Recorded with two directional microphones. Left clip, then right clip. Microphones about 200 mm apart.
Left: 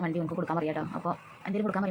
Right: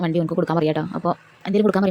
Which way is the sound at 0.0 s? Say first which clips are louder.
Right 10 dB; 65° right (ahead or behind).